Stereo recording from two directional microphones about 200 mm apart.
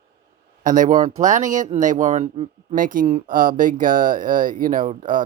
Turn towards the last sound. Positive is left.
turn(degrees=-40)  # may be behind; listen again after turning